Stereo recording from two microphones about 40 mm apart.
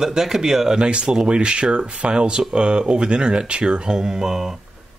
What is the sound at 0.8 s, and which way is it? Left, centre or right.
Speech, right.